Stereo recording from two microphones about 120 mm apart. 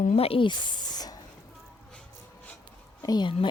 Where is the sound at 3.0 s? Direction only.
40° left (ahead or behind).